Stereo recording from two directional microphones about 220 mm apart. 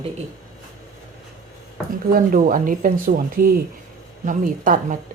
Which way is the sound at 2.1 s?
40° right (ahead or behind).